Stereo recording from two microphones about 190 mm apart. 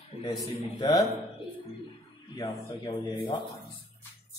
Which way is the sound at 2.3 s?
20° left (ahead or behind).